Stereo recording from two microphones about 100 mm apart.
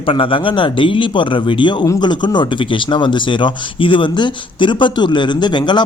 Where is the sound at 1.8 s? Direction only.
40° left (ahead or behind).